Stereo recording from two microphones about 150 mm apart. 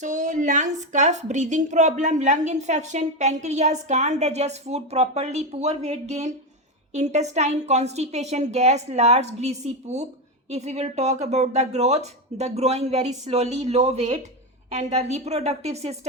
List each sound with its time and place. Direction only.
0.0 s a woman's voice: 55° right (ahead or behind)